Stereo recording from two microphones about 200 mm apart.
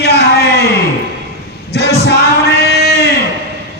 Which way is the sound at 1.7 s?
55° left (ahead or behind).